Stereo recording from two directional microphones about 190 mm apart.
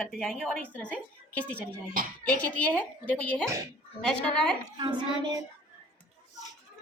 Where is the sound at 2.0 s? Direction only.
50° right (ahead or behind).